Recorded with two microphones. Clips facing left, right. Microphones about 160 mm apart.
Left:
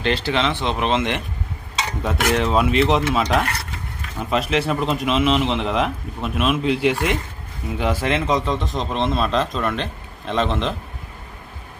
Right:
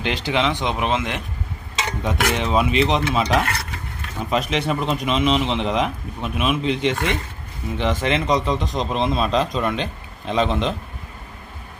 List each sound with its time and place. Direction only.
0.0 s speech: 15° right (ahead or behind); by 10.8 s centre (ahead or behind)